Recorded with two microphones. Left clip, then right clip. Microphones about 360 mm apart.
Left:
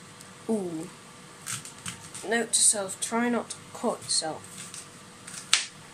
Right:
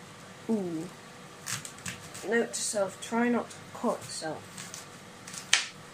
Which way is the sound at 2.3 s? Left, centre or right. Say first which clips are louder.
Left 2 dB; left.